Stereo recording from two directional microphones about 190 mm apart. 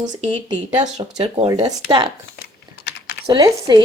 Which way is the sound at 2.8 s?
60° left (ahead or behind).